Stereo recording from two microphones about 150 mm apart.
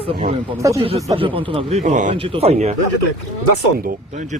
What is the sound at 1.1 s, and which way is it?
Speech, 35° right (ahead or behind).